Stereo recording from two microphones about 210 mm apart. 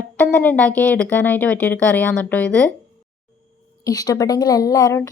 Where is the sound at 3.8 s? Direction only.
15° left (ahead or behind).